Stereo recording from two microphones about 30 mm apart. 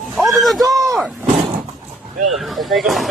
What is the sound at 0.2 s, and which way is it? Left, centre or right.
Speech, centre.